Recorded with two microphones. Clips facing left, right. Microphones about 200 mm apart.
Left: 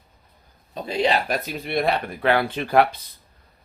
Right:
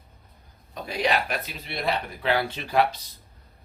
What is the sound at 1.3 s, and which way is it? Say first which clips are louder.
Speech: left 7 dB; 45° left (ahead or behind).